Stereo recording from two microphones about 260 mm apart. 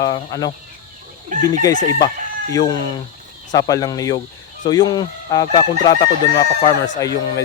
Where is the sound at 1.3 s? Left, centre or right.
Right.